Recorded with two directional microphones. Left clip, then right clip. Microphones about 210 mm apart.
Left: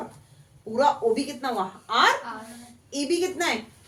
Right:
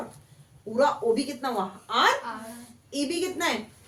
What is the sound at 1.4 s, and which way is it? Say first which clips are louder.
A woman's voice: left 1 dB; 25° left (ahead or behind).